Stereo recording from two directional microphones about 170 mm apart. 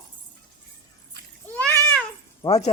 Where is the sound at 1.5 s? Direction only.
5° left (ahead or behind).